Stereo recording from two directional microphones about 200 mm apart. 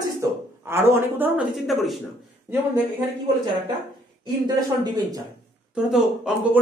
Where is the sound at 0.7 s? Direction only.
10° right (ahead or behind).